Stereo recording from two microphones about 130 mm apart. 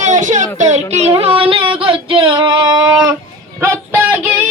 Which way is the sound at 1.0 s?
50° right (ahead or behind).